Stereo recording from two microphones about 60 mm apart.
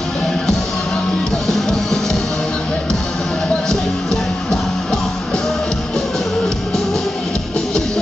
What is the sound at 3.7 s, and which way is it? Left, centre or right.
Music, centre.